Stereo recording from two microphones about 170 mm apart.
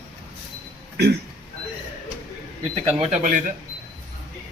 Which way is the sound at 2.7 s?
40° right (ahead or behind).